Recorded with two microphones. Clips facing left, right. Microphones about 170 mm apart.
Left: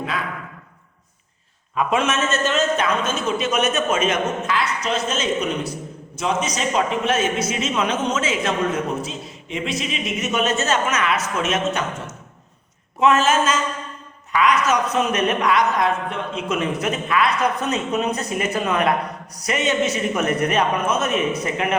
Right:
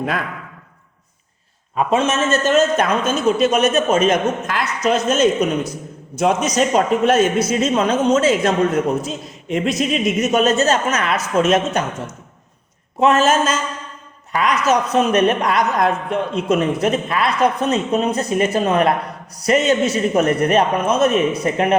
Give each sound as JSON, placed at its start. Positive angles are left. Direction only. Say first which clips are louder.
{"t": 1.7, "sound": "a woman's voice", "louder": "right 3 dB", "side_deg": -30}
{"t": 2.5, "sound": "a woman's voice", "louder": "right 7 dB", "side_deg": -45}
{"t": 13.0, "sound": "a woman's voice", "louder": "right 3 dB", "side_deg": -40}